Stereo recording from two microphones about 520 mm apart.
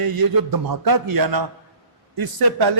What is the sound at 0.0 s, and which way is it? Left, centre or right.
A man's voice, right.